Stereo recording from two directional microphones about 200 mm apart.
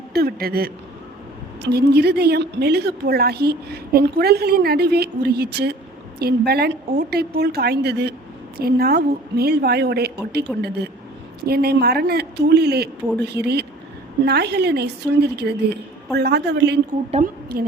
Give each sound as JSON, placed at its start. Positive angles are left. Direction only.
{"t": 0.1, "sound": "a woman's voice", "side_deg": -50}
{"t": 17.1, "sound": "a woman's voice", "side_deg": -30}